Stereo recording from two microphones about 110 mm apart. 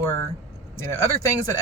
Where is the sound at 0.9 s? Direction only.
30° left (ahead or behind).